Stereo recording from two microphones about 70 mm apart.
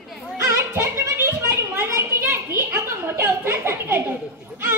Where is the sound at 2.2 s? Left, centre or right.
Right.